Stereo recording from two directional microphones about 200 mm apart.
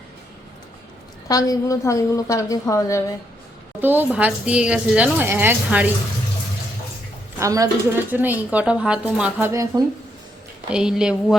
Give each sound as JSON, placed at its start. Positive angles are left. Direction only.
{"t": 1.3, "sound": "a woman's voice", "side_deg": 15}
{"t": 3.8, "sound": "a woman's voice", "side_deg": -10}
{"t": 7.3, "sound": "a woman's voice", "side_deg": -15}
{"t": 9.5, "sound": "a woman's voice", "side_deg": -15}
{"t": 10.7, "sound": "speech", "side_deg": -5}